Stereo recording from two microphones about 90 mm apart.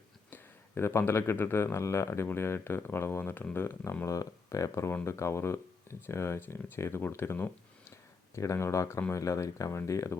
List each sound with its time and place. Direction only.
0.3 s speech: 20° left (ahead or behind)